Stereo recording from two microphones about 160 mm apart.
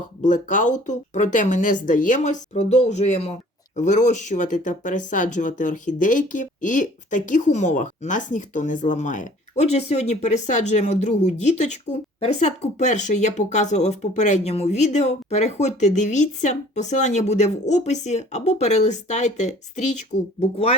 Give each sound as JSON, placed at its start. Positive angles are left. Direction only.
{"t": 0.3, "sound": "speech", "side_deg": 50}